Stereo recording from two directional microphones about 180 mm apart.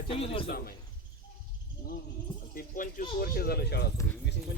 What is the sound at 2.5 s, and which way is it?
Speech, 50° left (ahead or behind).